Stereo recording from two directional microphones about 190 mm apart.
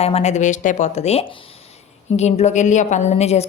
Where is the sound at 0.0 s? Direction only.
35° left (ahead or behind).